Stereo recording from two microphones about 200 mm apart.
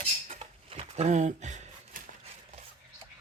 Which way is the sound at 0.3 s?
30° right (ahead or behind).